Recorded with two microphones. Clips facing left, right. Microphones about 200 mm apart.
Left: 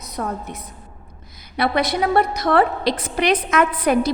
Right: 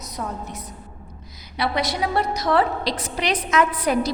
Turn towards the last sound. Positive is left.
turn(degrees=55)  # may be behind; listen again after turning